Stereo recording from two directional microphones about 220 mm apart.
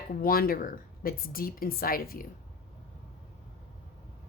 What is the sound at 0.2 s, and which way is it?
Speech, 40° left (ahead or behind).